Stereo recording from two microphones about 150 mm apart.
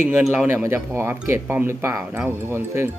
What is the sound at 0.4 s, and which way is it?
Speech, 15° right (ahead or behind).